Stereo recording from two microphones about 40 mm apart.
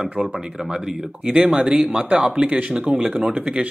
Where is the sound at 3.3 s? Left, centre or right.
Right.